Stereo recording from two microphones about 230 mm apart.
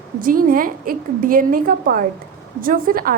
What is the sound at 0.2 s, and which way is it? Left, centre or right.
A woman's voice, right.